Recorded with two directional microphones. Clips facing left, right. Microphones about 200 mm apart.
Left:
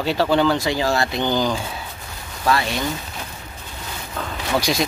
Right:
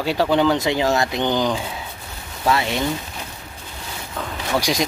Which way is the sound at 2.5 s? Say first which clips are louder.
Right 1 dB; 20° right (ahead or behind).